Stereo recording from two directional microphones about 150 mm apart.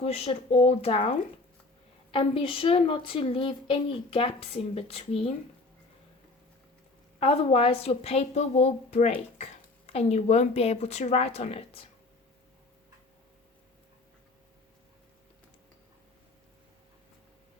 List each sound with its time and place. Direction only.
0.0 s a woman's voice: 40° left (ahead or behind)
2.1 s a woman's voice: 35° left (ahead or behind)
7.2 s a woman's voice: 40° left (ahead or behind)